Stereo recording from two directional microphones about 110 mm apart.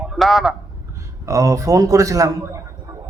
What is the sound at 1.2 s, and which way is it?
A man's voice, 30° right (ahead or behind).